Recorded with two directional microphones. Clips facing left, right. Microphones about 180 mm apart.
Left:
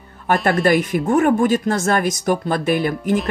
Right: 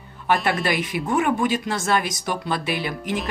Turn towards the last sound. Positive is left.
turn(degrees=45)  # may be behind; listen again after turning